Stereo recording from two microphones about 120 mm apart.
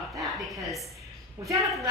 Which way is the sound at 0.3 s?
Centre (ahead or behind).